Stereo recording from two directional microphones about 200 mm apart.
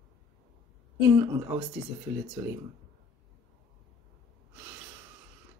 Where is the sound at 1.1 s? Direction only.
15° right (ahead or behind).